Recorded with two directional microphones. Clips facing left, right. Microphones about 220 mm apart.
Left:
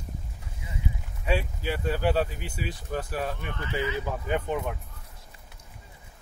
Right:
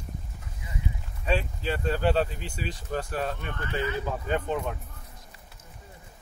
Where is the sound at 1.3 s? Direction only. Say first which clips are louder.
Even; 10° left (ahead or behind).